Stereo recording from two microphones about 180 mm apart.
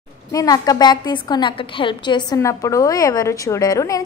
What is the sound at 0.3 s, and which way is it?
A woman's voice, 20° left (ahead or behind).